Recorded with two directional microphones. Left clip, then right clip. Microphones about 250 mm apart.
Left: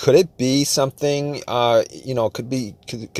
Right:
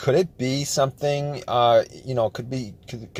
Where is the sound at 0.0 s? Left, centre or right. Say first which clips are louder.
Left 6 dB; left.